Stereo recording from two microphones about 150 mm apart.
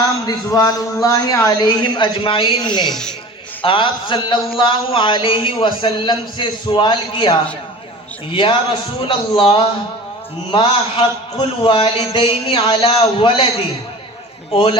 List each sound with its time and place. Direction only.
0.3 s a woman's voice: 20° left (ahead or behind)
2.8 s speech: 5° left (ahead or behind)
3.6 s speech: 35° left (ahead or behind)
9.0 s speech: 35° left (ahead or behind)
14.5 s speech: 30° left (ahead or behind)